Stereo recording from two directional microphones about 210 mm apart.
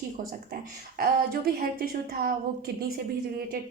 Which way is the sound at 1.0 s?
45° right (ahead or behind).